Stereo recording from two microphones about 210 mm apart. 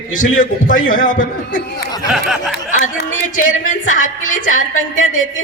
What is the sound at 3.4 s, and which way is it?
A man's voice, 40° left (ahead or behind).